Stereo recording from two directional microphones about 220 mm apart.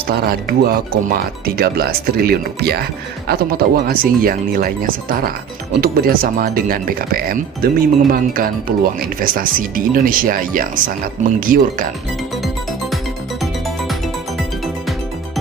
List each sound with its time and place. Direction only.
0.1 s speech: 45° right (ahead or behind)
13.4 s music: centre (ahead or behind)